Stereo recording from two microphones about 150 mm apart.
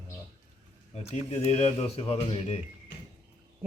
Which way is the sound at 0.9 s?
45° left (ahead or behind).